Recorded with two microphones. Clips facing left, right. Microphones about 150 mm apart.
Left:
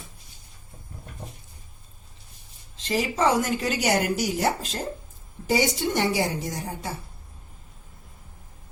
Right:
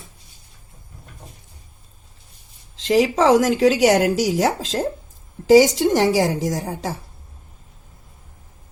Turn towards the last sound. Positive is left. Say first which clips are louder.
# right 8 dB
turn(degrees=-90)